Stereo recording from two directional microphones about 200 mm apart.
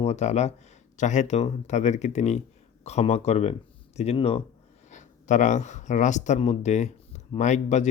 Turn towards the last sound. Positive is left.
turn(degrees=35)  # may be behind; listen again after turning